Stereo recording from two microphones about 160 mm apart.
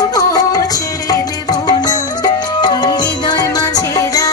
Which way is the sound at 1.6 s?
25° left (ahead or behind).